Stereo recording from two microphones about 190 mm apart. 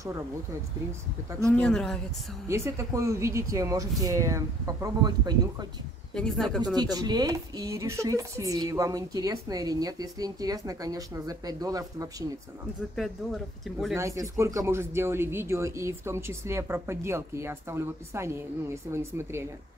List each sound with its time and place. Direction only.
1.6 s speech: 5° left (ahead or behind)
2.4 s speech: 15° right (ahead or behind)
6.1 s speech: 5° left (ahead or behind)
6.6 s speech: 20° right (ahead or behind)
12.9 s speech: centre (ahead or behind)
13.9 s speech: 15° right (ahead or behind)